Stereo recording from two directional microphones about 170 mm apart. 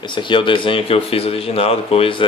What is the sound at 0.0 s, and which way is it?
Speech, 30° left (ahead or behind).